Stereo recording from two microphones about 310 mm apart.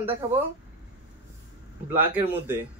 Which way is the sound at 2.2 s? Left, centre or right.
Centre.